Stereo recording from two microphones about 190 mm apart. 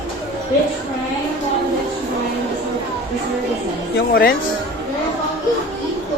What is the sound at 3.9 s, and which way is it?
Speech, 55° left (ahead or behind).